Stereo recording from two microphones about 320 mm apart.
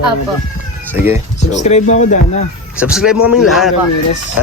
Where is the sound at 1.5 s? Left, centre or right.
Left.